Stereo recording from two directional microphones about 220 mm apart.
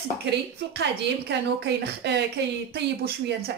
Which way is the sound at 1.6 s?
50° right (ahead or behind).